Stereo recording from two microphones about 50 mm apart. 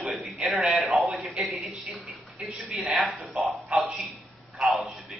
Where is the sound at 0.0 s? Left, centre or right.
Centre.